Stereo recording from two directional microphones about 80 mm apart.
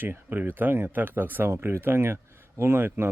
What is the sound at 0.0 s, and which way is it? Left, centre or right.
Speech, right.